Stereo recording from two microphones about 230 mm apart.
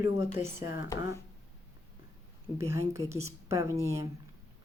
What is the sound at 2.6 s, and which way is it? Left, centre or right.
Speech, centre.